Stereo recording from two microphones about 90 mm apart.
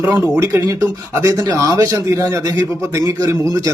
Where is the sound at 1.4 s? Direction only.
40° right (ahead or behind).